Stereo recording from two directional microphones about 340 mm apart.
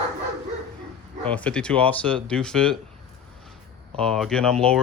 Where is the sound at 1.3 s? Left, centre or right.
Centre.